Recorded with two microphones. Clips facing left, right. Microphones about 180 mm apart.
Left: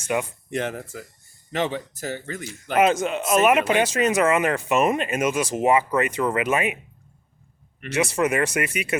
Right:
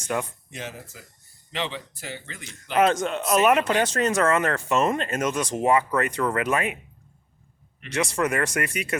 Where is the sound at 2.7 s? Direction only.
5° left (ahead or behind).